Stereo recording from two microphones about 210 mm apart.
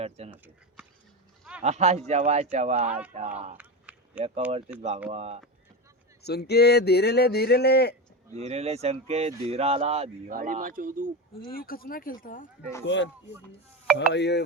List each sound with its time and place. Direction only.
0.3 s speech: 5° right (ahead or behind)
1.6 s a man's voice: 30° right (ahead or behind)
3.6 s a sound: 5° right (ahead or behind)
4.4 s speech: 5° right (ahead or behind)
5.1 s speech: 30° right (ahead or behind)
6.2 s speech: 50° left (ahead or behind)
8.4 s speech: 30° right (ahead or behind)
10.3 s a man's voice: 40° right (ahead or behind)
11.5 s speech: 45° left (ahead or behind)
12.8 s speech: 60° left (ahead or behind)
14.1 s speech: 55° left (ahead or behind)